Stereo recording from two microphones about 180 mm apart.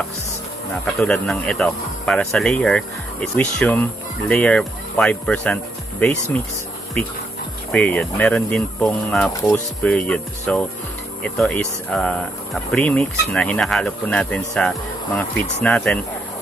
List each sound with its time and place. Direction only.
0.8 s speech: 5° left (ahead or behind)
7.7 s speech: 5° left (ahead or behind)